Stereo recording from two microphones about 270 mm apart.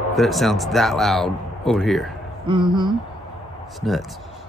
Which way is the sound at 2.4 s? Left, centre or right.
Centre.